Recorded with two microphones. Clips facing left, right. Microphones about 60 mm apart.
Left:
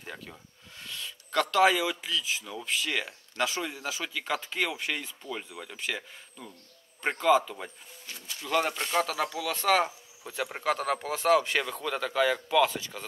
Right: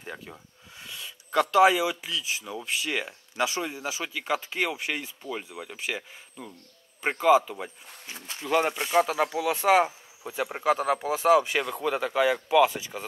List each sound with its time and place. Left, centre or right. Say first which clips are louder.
0.0 s speech: right 3 dB; centre
8.1 s speech: right 3 dB; right
8.5 s speech: right 3 dB; centre